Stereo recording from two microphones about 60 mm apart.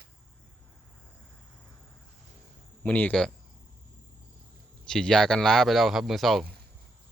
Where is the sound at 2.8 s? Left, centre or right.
Left.